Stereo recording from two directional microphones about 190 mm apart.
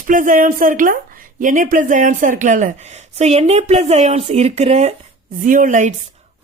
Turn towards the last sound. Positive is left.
turn(degrees=-40)  # may be behind; listen again after turning